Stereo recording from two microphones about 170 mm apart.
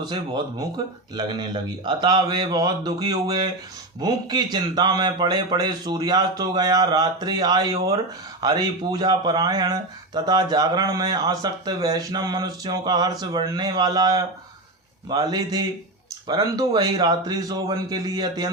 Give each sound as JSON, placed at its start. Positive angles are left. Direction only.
{"t": 1.1, "sound": "a man's voice", "side_deg": -25}